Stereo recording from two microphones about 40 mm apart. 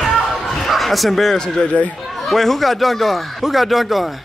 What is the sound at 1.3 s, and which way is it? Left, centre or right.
Speech, centre.